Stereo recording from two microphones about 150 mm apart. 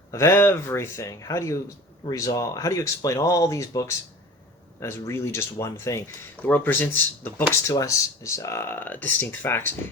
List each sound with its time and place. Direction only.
0.1 s speech: 20° left (ahead or behind)